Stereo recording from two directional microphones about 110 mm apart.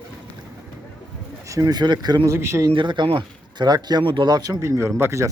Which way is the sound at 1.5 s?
30° right (ahead or behind).